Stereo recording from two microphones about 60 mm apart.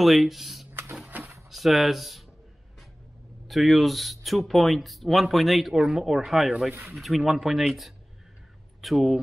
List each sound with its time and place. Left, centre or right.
0.0 s speech: centre
3.4 s speech: centre
6.7 s speech: right
7.0 s speech: centre